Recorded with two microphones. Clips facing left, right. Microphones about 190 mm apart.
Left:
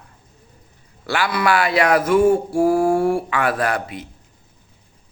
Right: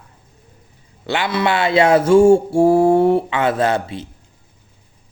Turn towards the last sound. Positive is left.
turn(degrees=-30)  # may be behind; listen again after turning